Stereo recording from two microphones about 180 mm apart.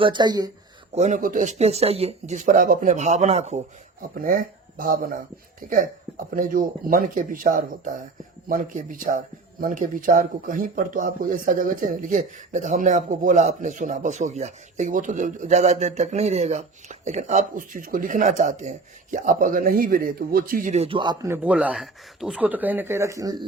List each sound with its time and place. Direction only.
0.0 s a man's voice: 25° right (ahead or behind)
0.9 s speech: 40° right (ahead or behind)
4.1 s a man's voice: 50° right (ahead or behind); by 23.5 s 20° right (ahead or behind)